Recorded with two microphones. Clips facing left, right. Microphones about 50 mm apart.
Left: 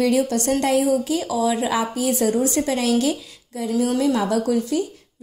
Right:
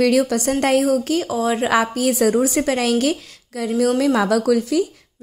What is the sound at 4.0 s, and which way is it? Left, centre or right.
Speech, right.